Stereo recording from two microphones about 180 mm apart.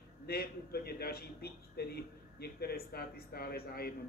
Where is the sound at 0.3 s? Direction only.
60° left (ahead or behind).